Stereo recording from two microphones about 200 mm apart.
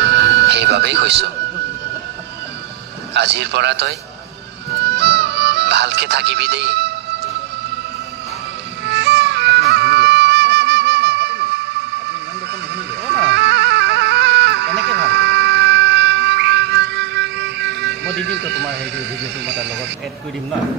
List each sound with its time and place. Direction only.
0.0 s music: 60° right (ahead or behind)
0.5 s speech: 60° right (ahead or behind)
3.2 s speech: 60° right (ahead or behind)
4.8 s music: 60° right (ahead or behind)
8.8 s music: 60° right (ahead or behind)
13.1 s music: 60° right (ahead or behind)
19.4 s speech: 60° right (ahead or behind)